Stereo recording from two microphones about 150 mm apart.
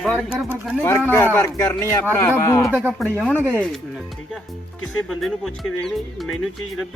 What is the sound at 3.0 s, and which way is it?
Speech, 10° left (ahead or behind).